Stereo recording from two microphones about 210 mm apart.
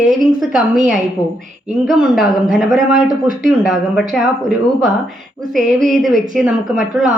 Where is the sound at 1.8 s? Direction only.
5° right (ahead or behind).